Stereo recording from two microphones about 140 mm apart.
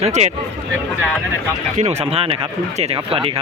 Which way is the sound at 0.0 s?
55° right (ahead or behind).